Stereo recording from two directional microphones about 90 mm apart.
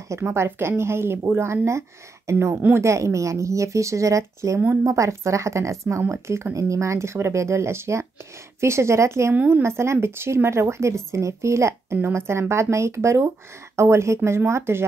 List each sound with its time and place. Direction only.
0.1 s speech: 30° right (ahead or behind)
9.3 s speech: 20° right (ahead or behind)